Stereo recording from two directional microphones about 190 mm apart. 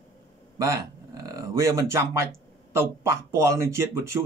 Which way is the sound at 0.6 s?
20° right (ahead or behind).